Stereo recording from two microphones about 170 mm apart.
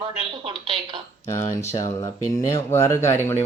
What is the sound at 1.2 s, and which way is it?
Speech, 15° left (ahead or behind).